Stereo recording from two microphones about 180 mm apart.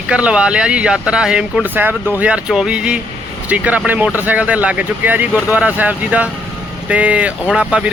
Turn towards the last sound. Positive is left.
turn(degrees=-5)  # may be behind; listen again after turning